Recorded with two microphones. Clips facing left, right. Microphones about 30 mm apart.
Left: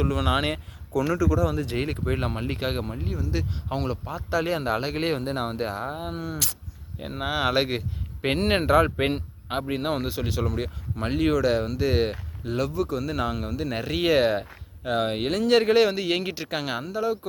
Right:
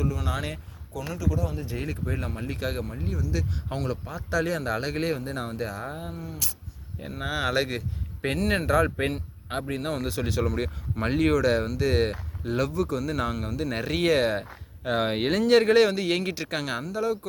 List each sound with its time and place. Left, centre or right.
0.0 s speech: left
1.6 s speech: left
5.0 s speech: left
6.1 s speech: left
7.0 s speech: left
10.1 s speech: centre
14.0 s speech: centre
14.8 s speech: centre